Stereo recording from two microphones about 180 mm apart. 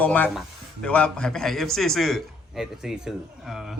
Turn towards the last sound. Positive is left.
turn(degrees=0)  # may be behind; listen again after turning